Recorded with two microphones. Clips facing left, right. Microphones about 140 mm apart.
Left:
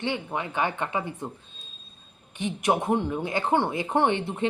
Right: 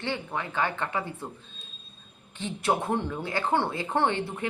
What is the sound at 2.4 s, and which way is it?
Speech, 15° left (ahead or behind).